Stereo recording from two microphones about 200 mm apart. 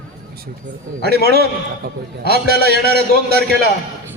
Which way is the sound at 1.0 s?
55° right (ahead or behind).